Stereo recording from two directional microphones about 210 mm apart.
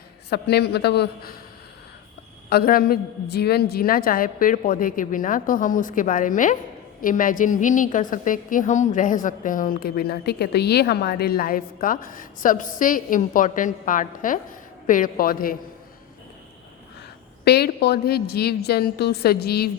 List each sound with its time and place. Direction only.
0.3 s a woman's voice: 50° left (ahead or behind)
2.5 s a woman's voice: 45° left (ahead or behind)
17.4 s a woman's voice: 50° left (ahead or behind)